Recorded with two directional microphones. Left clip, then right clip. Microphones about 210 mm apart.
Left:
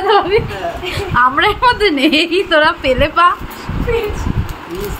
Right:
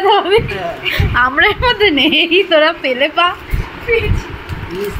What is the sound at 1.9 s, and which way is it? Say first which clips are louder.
Speech: right 1 dB; 25° left (ahead or behind).